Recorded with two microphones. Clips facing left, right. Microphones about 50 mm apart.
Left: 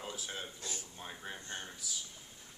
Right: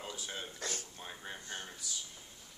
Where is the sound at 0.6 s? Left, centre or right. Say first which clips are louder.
Right 4 dB; right.